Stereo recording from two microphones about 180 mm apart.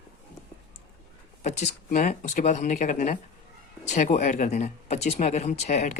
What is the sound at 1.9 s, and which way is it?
Speech, 45° left (ahead or behind).